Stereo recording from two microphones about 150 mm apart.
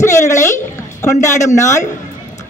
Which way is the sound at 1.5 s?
20° left (ahead or behind).